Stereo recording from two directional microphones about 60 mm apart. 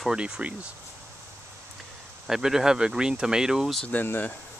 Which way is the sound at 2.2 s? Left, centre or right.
Centre.